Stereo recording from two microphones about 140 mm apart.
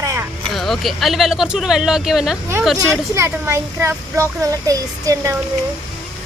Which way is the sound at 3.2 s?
20° right (ahead or behind).